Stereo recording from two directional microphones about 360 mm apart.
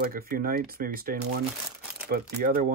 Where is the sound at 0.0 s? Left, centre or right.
Right.